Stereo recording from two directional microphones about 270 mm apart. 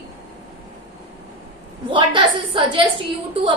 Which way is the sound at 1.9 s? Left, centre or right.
Centre.